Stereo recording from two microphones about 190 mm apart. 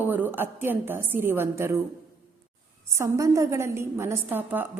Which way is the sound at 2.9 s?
15° right (ahead or behind).